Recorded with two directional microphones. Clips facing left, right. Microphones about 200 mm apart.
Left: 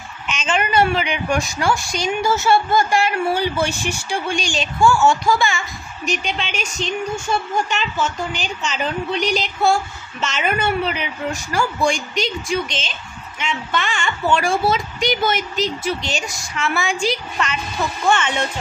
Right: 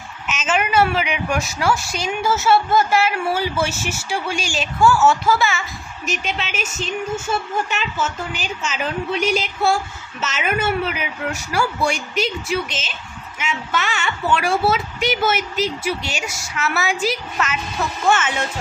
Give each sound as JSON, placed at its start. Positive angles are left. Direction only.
{"t": 0.3, "sound": "a woman's voice", "side_deg": -5}